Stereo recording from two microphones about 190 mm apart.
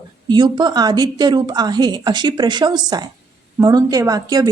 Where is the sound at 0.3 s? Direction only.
20° right (ahead or behind).